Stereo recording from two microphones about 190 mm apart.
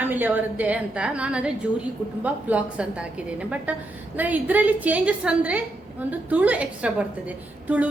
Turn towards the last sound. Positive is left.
turn(degrees=-5)  # may be behind; listen again after turning